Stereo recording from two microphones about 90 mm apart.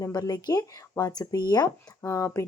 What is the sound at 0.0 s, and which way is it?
Speech, 40° left (ahead or behind).